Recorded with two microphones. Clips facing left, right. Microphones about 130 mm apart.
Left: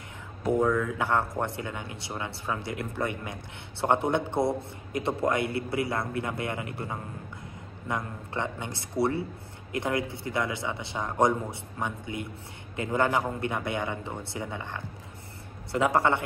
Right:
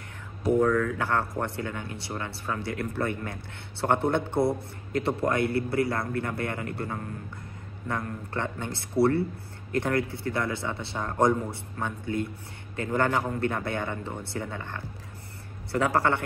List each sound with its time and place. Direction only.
0.5 s a man's voice: 15° left (ahead or behind)